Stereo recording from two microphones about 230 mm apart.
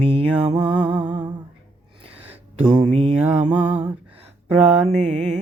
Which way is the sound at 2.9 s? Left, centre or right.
Right.